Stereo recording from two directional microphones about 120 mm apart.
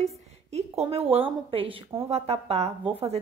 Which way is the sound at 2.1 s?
60° right (ahead or behind).